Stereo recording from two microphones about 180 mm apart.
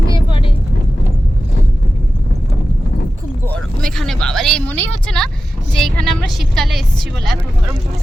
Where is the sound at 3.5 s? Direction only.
Centre (ahead or behind).